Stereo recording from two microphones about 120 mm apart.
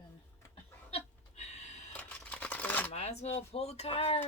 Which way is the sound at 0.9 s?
65° left (ahead or behind).